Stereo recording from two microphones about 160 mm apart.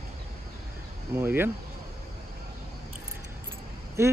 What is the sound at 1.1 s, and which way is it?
Speech, 15° right (ahead or behind).